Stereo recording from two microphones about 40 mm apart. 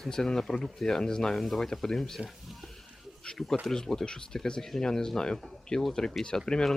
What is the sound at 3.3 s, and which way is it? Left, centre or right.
Speech, left.